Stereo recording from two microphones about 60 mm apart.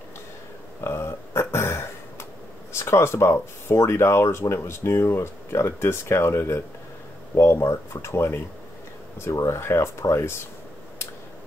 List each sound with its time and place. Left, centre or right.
0.7 s a sound: left
2.7 s speech: left
9.5 s speech: left